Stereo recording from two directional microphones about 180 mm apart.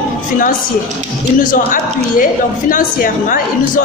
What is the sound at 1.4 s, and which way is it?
A woman's voice, 50° left (ahead or behind).